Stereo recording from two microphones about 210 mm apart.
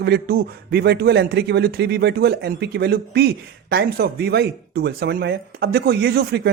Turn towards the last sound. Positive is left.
turn(degrees=-50)  # may be behind; listen again after turning